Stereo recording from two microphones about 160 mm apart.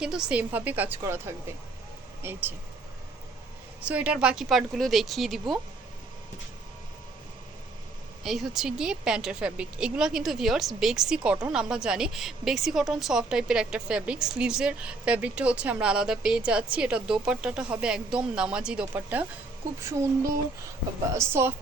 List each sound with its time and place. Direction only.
0.0 s a woman's voice: 5° right (ahead or behind)
3.8 s a woman's voice: 10° right (ahead or behind)
8.2 s a woman's voice: centre (ahead or behind); by 20.1 s 20° right (ahead or behind)
21.1 s a woman's voice: 15° right (ahead or behind)